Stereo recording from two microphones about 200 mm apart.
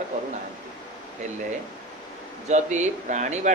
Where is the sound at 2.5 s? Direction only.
35° right (ahead or behind).